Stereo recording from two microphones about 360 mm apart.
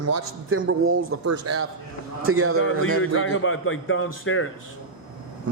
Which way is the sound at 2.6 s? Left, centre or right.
Left.